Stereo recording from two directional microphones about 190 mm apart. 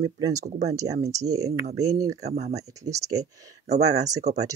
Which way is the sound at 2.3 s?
35° right (ahead or behind).